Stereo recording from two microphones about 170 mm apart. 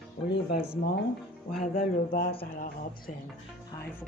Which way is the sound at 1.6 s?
50° left (ahead or behind).